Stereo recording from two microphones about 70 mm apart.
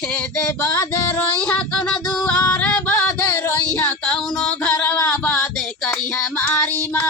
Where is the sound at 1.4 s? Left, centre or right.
Centre.